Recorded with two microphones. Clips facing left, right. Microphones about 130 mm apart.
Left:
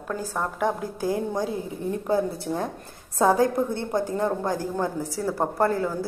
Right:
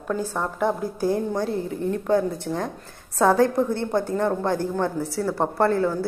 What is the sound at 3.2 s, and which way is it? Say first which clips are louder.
Speech: right 2 dB; 15° left (ahead or behind).